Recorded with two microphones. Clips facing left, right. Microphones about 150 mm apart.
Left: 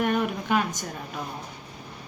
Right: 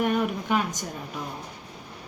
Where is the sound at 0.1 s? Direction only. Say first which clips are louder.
Even; 10° right (ahead or behind).